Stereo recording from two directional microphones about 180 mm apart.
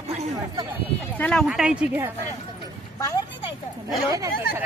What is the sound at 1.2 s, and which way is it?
Speech, 5° left (ahead or behind).